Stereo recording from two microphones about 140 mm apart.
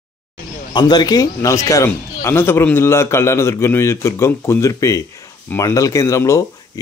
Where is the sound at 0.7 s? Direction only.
30° left (ahead or behind).